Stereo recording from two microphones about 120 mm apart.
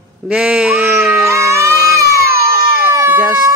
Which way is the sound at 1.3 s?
25° right (ahead or behind).